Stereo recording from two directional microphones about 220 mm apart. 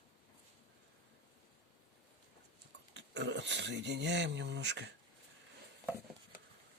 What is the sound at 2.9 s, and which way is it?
Speech, 55° right (ahead or behind).